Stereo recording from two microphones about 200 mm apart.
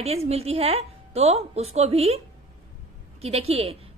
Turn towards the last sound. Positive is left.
turn(degrees=-30)  # may be behind; listen again after turning